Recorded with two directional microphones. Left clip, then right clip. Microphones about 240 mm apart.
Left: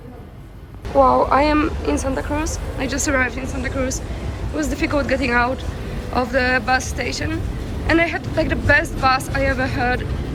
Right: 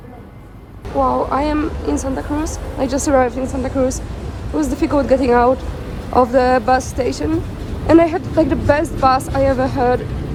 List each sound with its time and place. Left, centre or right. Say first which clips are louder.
0.9 s a woman's voice: left 2 dB; centre